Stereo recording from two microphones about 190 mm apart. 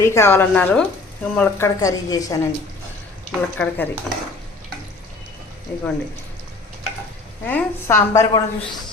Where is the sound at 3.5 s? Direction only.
10° left (ahead or behind).